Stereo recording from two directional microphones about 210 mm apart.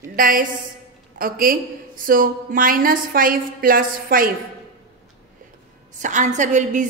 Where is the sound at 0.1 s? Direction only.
40° right (ahead or behind).